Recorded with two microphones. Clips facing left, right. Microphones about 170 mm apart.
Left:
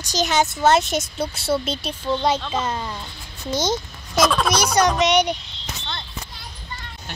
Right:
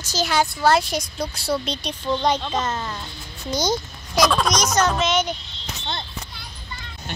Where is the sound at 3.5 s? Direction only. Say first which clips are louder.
Even; centre (ahead or behind).